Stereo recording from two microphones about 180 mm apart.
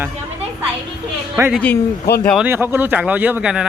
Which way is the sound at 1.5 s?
5° left (ahead or behind).